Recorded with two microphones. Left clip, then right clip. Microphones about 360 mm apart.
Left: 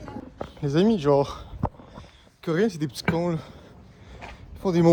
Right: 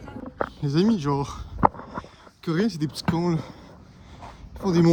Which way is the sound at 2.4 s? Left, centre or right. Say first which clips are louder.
Left 2 dB; centre.